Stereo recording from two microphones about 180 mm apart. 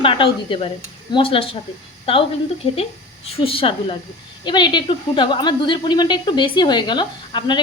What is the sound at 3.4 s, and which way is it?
A woman's voice, 30° left (ahead or behind).